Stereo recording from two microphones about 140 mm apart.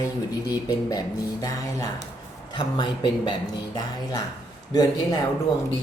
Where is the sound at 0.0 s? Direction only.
25° left (ahead or behind).